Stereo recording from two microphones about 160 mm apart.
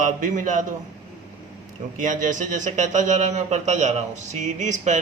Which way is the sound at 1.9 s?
55° right (ahead or behind).